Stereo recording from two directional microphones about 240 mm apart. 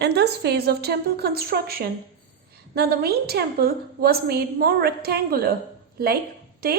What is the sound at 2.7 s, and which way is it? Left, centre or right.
A woman's voice, right.